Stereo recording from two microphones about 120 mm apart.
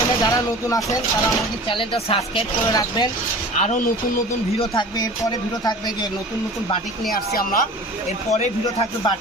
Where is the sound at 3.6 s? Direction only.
90° left.